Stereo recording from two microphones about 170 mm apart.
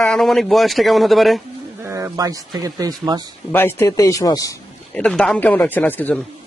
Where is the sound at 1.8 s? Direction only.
15° right (ahead or behind).